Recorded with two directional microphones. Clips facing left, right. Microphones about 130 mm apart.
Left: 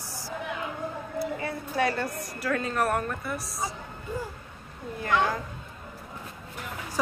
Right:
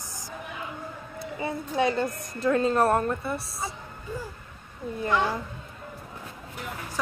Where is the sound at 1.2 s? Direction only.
20° right (ahead or behind).